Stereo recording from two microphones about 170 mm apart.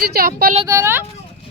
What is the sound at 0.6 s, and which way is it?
Speech, 15° right (ahead or behind).